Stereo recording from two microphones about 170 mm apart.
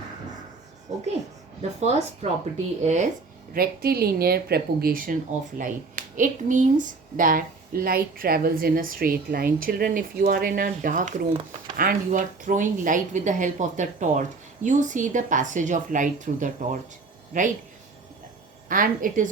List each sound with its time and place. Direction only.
1.8 s speech: 40° right (ahead or behind)
3.5 s a woman's voice: 65° right (ahead or behind)
18.7 s speech: 55° right (ahead or behind)